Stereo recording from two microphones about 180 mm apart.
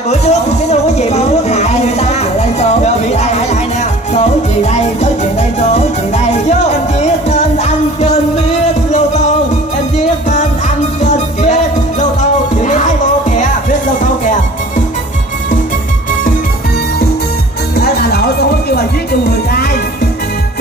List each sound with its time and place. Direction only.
0.1 s music: 40° left (ahead or behind)
11.0 s music: 40° left (ahead or behind)
12.6 s music: 40° left (ahead or behind)
17.7 s music: 60° left (ahead or behind)